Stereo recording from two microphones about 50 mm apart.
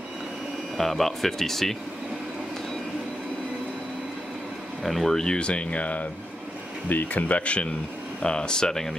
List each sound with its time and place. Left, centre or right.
0.7 s speech: centre
4.8 s speech: centre